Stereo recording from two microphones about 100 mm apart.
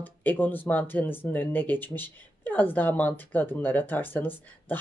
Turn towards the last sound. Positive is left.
turn(degrees=20)  # may be behind; listen again after turning